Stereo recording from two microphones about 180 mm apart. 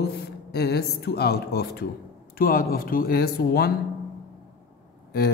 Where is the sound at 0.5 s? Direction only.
65° left (ahead or behind).